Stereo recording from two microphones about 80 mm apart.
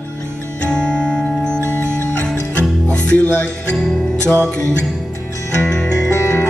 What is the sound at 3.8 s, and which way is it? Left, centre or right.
Music, centre.